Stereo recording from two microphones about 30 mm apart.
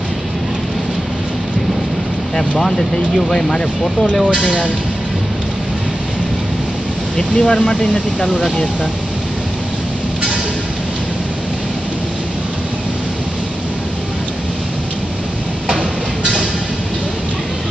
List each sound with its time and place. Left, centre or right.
7.2 s speech: left